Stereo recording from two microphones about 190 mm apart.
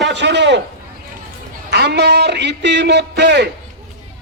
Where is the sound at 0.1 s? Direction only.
65° right (ahead or behind).